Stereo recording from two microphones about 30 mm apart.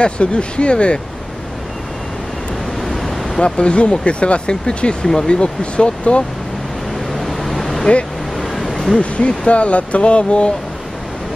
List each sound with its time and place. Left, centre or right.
0.0 s speech: left
2.8 s waves: centre
3.3 s speech: left
5.1 s speech: centre
5.4 s speech: left
7.1 s vehicle: centre
8.7 s speech: left